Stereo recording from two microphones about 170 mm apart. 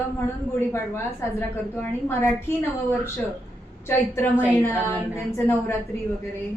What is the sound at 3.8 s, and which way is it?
A woman's voice, 15° left (ahead or behind).